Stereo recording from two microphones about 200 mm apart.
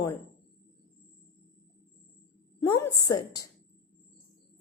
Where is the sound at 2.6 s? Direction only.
20° left (ahead or behind).